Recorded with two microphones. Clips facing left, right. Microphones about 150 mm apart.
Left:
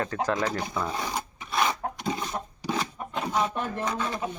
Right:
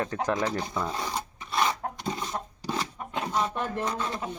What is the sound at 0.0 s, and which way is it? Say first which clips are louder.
Speech: left 1 dB; 15° right (ahead or behind).